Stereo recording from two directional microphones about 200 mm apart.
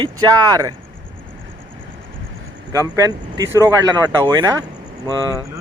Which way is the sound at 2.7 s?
15° right (ahead or behind).